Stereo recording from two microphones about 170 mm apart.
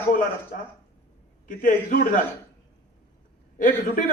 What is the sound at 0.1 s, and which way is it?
A man's voice, 55° left (ahead or behind).